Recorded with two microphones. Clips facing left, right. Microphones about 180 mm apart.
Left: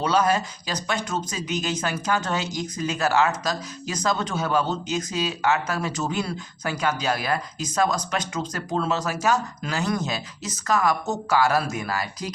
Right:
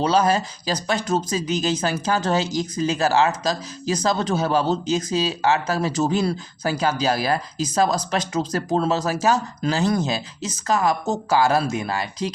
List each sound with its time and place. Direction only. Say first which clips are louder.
0.0 s speech: right 3 dB; 30° right (ahead or behind)